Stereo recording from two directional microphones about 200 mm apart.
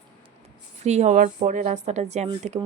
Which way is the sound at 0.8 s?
35° right (ahead or behind).